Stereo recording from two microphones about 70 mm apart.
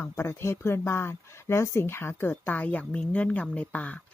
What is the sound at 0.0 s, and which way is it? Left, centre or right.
Speech, left.